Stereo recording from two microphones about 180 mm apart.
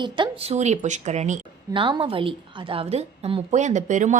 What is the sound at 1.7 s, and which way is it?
A woman's voice, 30° right (ahead or behind).